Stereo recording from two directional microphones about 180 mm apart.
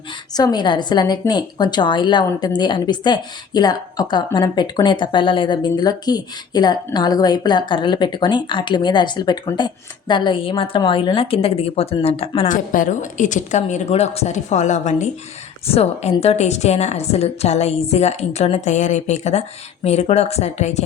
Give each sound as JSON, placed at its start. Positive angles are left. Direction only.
{"t": 0.3, "sound": "a woman's voice", "side_deg": 25}